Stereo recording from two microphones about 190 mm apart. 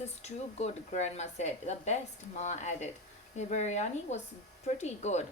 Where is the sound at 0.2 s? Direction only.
35° left (ahead or behind).